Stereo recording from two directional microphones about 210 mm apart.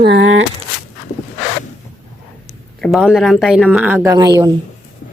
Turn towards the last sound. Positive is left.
turn(degrees=-20)  # may be behind; listen again after turning